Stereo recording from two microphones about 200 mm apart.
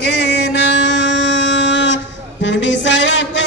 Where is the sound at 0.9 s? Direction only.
65° left (ahead or behind).